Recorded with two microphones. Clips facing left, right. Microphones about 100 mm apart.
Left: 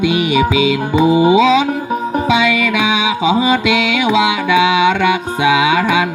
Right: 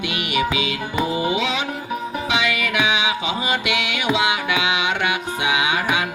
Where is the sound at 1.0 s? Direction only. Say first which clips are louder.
Left 12 dB; 20° left (ahead or behind).